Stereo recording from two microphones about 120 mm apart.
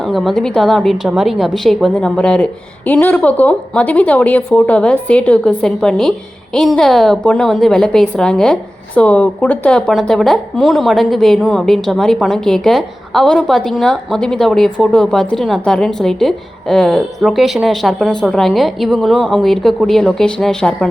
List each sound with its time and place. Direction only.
0.0 s a woman's voice: centre (ahead or behind)